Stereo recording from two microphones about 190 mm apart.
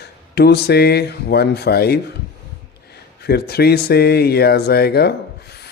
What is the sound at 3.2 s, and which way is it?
Speech, 55° left (ahead or behind).